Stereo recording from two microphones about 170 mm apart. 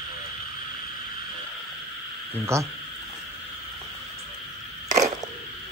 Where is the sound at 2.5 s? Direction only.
15° right (ahead or behind).